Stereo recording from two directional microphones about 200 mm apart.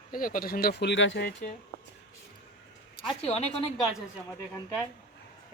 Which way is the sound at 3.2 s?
30° left (ahead or behind).